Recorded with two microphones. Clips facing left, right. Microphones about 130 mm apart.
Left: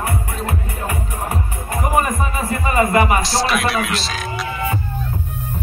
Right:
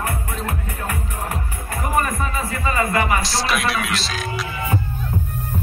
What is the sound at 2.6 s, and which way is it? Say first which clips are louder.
Music: left 5 dB; 25° left (ahead or behind).